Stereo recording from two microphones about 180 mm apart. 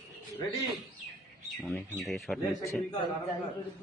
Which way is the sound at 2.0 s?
Centre (ahead or behind).